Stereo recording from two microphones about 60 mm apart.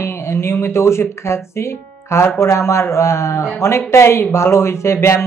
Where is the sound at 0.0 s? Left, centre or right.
Left.